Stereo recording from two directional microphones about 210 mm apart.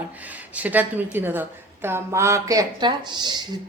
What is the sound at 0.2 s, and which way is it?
A woman's voice, 5° right (ahead or behind).